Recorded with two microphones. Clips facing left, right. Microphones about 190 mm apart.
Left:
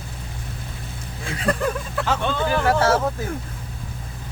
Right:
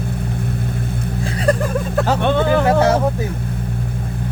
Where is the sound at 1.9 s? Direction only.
40° right (ahead or behind).